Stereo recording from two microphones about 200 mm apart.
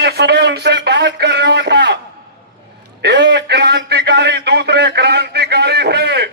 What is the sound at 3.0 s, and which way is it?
A man's voice, 60° right (ahead or behind).